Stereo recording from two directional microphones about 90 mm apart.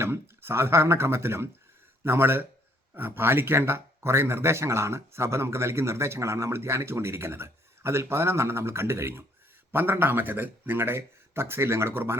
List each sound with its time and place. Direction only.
0.0 s speech: 25° right (ahead or behind)